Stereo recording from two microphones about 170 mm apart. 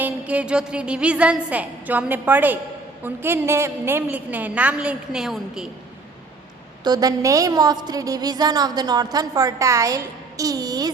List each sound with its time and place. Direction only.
0.0 s a woman's voice: 5° right (ahead or behind)
6.8 s a woman's voice: 25° right (ahead or behind)